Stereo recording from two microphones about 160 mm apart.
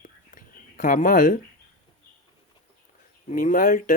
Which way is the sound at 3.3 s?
55° left (ahead or behind).